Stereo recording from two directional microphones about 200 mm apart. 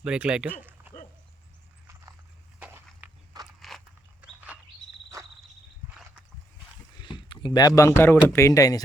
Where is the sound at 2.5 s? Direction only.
10° right (ahead or behind).